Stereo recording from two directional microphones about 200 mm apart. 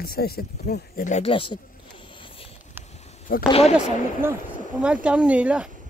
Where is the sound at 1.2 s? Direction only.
25° left (ahead or behind).